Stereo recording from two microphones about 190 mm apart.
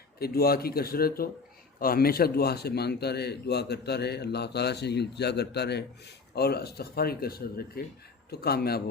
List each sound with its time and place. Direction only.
0.2 s speech: 55° left (ahead or behind)